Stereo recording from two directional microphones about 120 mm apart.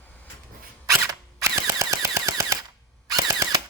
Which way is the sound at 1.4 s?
25° right (ahead or behind).